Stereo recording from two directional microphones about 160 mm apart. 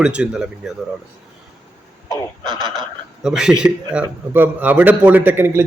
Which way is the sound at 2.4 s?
30° right (ahead or behind).